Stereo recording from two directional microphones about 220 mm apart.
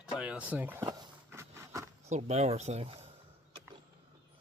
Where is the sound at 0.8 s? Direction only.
15° right (ahead or behind).